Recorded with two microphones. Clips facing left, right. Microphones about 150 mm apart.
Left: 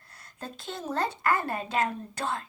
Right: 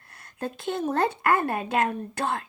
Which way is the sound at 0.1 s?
60° right (ahead or behind).